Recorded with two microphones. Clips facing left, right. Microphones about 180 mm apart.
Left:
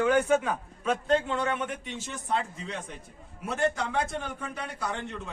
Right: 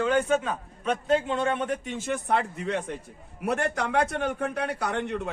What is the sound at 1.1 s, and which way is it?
Speech, 20° right (ahead or behind).